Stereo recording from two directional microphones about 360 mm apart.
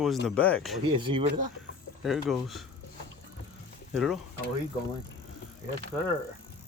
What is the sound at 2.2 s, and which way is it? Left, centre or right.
Speech, centre.